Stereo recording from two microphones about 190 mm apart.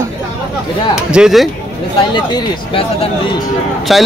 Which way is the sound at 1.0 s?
5° right (ahead or behind).